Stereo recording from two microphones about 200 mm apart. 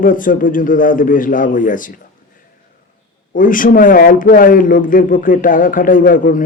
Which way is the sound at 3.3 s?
40° left (ahead or behind).